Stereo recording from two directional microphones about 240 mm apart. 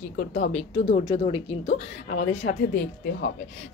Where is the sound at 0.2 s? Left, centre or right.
Left.